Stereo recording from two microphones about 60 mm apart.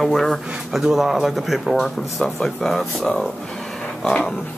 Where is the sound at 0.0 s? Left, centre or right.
Centre.